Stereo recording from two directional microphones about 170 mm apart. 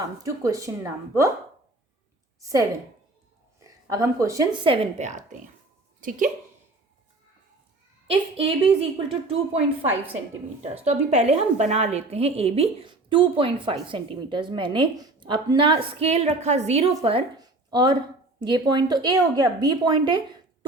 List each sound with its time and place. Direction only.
0.0 s a woman's voice: 20° right (ahead or behind)
2.4 s a woman's voice: 20° right (ahead or behind)
4.6 s a woman's voice: 40° right (ahead or behind)
8.0 s a woman's voice: 35° right (ahead or behind)
10.8 s a woman's voice: 40° right (ahead or behind)